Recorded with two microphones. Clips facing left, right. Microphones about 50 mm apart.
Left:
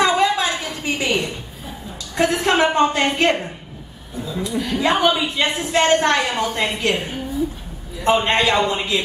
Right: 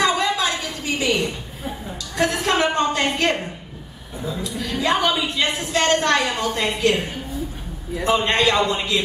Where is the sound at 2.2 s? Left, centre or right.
Left.